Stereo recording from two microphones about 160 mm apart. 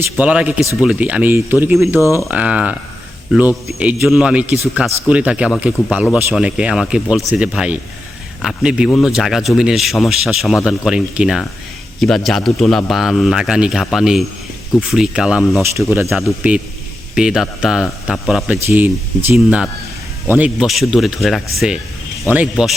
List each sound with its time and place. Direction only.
0.0 s a man's voice: 10° right (ahead or behind)
2.0 s speech: 20° left (ahead or behind)
2.2 s a man's voice: 10° right (ahead or behind)